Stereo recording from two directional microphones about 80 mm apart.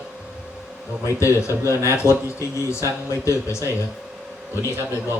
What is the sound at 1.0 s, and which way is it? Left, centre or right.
A man's voice, left.